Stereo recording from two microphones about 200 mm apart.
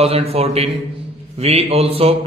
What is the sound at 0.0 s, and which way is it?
A man's voice, 30° right (ahead or behind).